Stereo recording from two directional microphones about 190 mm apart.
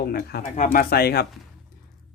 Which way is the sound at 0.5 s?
45° left (ahead or behind).